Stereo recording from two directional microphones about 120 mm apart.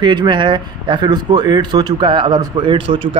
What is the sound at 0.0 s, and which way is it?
Speech, 40° right (ahead or behind).